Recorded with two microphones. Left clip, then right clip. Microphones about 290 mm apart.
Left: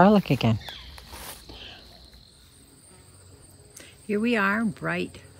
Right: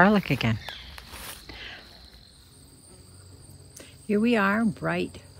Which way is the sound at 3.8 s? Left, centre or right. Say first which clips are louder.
Right 2 dB; centre.